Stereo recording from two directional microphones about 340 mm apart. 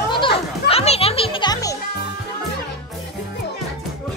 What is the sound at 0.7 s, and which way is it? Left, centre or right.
Children playing, centre.